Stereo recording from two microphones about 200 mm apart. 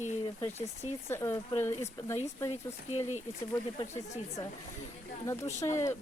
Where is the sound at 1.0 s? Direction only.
15° left (ahead or behind).